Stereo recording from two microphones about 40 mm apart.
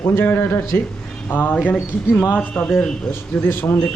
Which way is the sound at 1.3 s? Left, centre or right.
Left.